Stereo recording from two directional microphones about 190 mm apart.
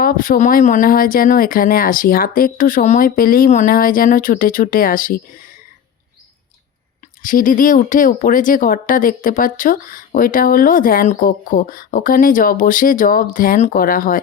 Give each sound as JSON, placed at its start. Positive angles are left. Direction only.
{"t": 0.0, "sound": "speech", "side_deg": 50}
{"t": 7.2, "sound": "speech", "side_deg": 45}